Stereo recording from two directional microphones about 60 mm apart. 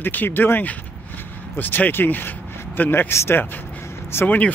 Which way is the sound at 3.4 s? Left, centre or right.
Left.